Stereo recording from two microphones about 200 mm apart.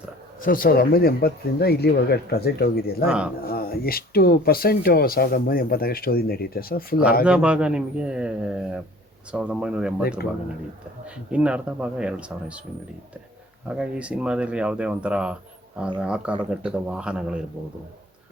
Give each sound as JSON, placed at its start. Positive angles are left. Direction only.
{"t": 0.4, "sound": "speech", "side_deg": 45}
{"t": 3.1, "sound": "speech", "side_deg": -5}
{"t": 3.4, "sound": "speech", "side_deg": 50}
{"t": 7.3, "sound": "speech", "side_deg": -5}
{"t": 11.0, "sound": "speech", "side_deg": -5}
{"t": 13.7, "sound": "speech", "side_deg": -5}